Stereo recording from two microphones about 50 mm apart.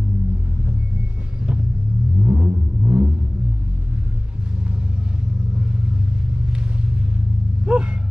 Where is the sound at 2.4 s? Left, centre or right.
Right.